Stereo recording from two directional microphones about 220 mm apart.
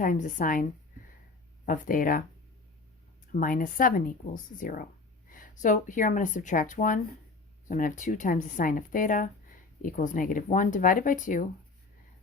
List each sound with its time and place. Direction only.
0.0 s speech: 35° left (ahead or behind)
1.6 s speech: 35° left (ahead or behind)
3.3 s speech: 40° left (ahead or behind)